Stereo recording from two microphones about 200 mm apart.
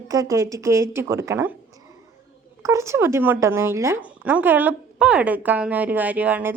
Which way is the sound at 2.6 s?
15° right (ahead or behind).